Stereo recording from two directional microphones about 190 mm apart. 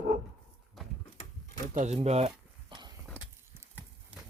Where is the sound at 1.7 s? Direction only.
35° right (ahead or behind).